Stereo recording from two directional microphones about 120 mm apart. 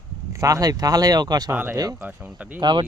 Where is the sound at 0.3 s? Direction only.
30° right (ahead or behind).